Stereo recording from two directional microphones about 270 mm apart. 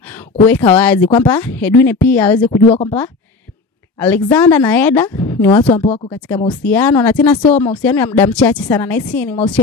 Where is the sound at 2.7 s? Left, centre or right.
Left.